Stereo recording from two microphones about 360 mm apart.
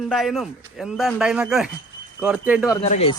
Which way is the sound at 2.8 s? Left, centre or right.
Centre.